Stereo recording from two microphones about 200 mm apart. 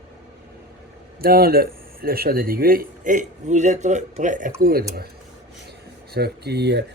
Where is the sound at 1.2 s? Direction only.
50° right (ahead or behind).